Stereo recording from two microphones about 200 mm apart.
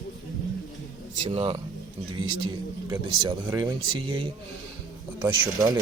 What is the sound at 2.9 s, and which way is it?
Speech, 15° right (ahead or behind).